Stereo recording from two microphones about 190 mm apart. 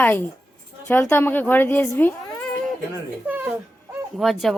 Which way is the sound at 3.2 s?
10° right (ahead or behind).